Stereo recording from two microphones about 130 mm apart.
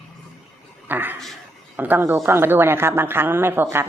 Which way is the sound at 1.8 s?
15° right (ahead or behind).